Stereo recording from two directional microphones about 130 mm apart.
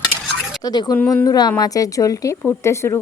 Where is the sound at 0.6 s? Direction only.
30° left (ahead or behind).